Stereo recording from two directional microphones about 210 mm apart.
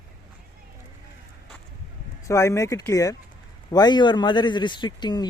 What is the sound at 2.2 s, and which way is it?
A man's voice, 15° left (ahead or behind).